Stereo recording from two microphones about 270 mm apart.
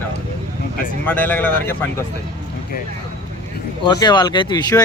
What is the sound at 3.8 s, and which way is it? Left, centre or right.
Speech, centre.